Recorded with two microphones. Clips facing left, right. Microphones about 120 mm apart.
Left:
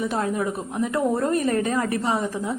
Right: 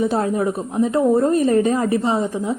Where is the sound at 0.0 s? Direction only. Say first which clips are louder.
Right 5 dB; 30° right (ahead or behind).